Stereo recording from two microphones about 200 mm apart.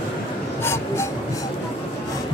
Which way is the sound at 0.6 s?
15° left (ahead or behind).